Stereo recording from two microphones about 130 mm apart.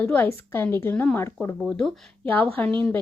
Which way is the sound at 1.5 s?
5° left (ahead or behind).